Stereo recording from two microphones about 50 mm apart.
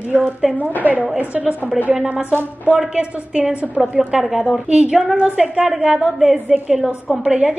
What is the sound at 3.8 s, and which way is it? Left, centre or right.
Speech, centre.